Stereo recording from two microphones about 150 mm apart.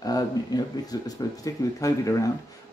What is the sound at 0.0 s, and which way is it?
Speech, 25° left (ahead or behind).